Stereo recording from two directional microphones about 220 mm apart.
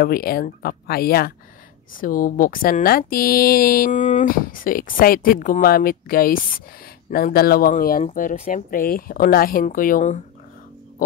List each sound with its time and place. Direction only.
0.0 s speech: 45° left (ahead or behind)